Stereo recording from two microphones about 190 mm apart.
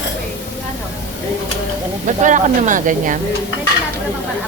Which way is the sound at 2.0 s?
40° right (ahead or behind).